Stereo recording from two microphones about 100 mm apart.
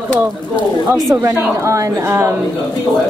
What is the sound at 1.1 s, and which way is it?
A woman's voice, 25° right (ahead or behind).